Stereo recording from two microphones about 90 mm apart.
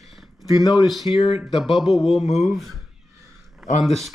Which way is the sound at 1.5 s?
65° left (ahead or behind).